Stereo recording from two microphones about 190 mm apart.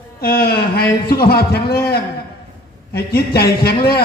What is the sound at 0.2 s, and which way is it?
A man's voice, 55° left (ahead or behind).